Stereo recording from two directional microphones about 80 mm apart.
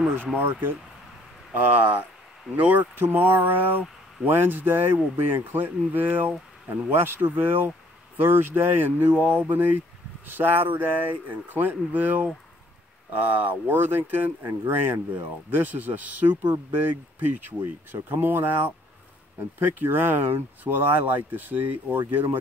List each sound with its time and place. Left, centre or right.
0.4 s speech: right
14.5 s speech: right
15.5 s speech: right
19.6 s speech: right